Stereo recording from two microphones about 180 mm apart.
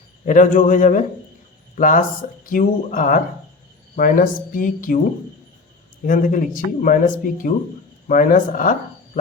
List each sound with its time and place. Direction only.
0.3 s speech: 45° left (ahead or behind)
6.1 s speech: 50° left (ahead or behind)